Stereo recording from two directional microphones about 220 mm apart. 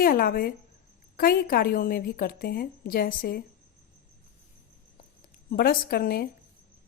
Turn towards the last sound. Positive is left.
turn(degrees=45)  # may be behind; listen again after turning